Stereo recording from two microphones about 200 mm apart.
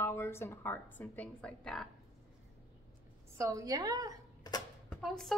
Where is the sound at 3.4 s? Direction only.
15° right (ahead or behind).